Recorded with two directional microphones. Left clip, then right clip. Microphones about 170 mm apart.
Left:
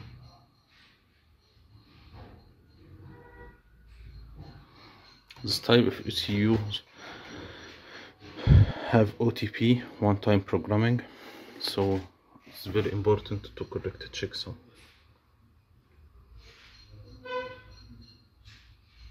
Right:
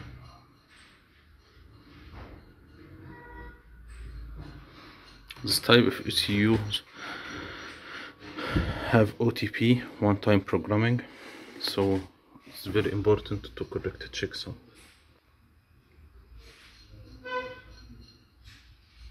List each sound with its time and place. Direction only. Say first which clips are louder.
5.3 s speech: right 2 dB; 25° left (ahead or behind)
6.7 s snort: right 4 dB; 15° left (ahead or behind)
10.8 s a sound: even; 35° left (ahead or behind)
12.5 s speech: right 1 dB; 20° left (ahead or behind)